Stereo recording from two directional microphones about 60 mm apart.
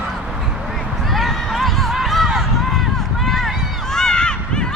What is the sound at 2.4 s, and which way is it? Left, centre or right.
Run, centre.